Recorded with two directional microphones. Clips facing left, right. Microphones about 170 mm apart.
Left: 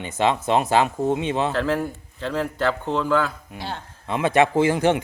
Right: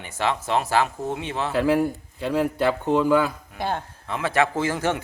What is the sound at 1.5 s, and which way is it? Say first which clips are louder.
Speech: right 3 dB; 10° right (ahead or behind).